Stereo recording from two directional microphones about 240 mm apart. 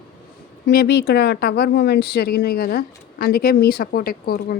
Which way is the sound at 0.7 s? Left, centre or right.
Left.